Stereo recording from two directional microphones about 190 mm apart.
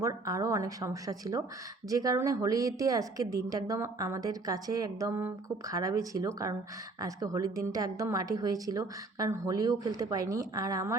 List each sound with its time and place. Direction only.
0.0 s a woman's voice: 15° right (ahead or behind)